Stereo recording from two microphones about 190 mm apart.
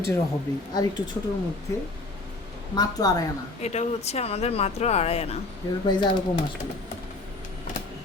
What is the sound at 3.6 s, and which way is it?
Speech, 35° left (ahead or behind).